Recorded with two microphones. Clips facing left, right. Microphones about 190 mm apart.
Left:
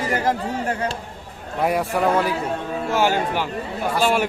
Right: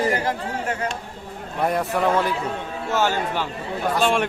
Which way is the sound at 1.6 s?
10° left (ahead or behind).